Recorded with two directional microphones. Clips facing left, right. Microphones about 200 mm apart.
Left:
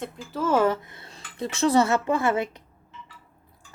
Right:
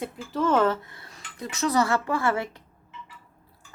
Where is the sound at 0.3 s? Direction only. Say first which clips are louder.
Even; 5° left (ahead or behind).